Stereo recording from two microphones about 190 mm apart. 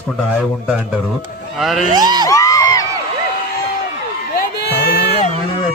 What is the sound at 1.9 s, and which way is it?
Speech, 20° right (ahead or behind).